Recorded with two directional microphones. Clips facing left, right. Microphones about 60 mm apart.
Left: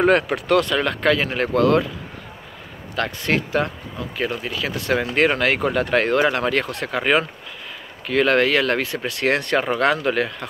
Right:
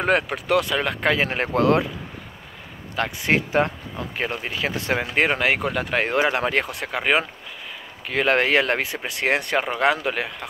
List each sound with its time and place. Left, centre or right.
0.0 s speech: centre; by 1.9 s right
3.0 s speech: centre
5.1 s speech: centre
6.0 s speech: centre